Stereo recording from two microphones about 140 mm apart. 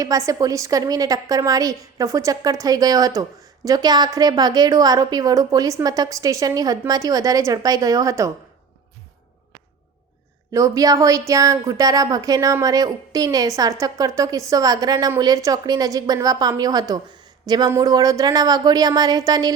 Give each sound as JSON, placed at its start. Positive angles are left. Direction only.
{"t": 0.0, "sound": "a woman's voice", "side_deg": -25}
{"t": 10.5, "sound": "a woman's voice", "side_deg": -25}